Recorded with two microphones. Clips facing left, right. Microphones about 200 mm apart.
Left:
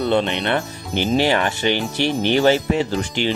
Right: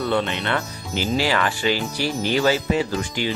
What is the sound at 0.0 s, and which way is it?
Speech, 20° left (ahead or behind).